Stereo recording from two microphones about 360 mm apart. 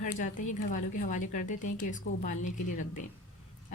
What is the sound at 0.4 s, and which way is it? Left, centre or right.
A woman's voice, left.